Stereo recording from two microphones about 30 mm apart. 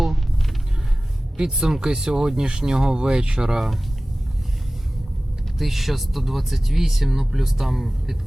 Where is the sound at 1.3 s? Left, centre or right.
Right.